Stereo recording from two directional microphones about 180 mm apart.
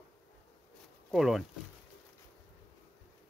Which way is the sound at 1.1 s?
Centre (ahead or behind).